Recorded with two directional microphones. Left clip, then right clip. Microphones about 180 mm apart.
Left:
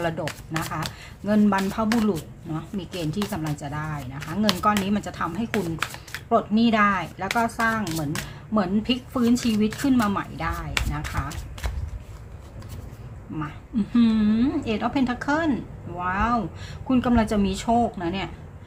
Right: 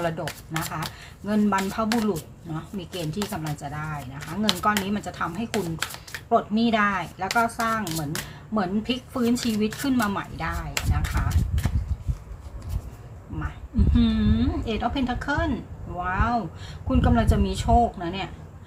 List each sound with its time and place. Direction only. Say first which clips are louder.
0.0 s speech: left 1 dB; 10° left (ahead or behind)
13.9 s a woman's voice: left 3 dB; 20° left (ahead or behind)